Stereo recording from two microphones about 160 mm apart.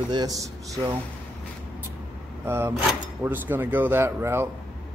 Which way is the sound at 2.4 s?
15° right (ahead or behind).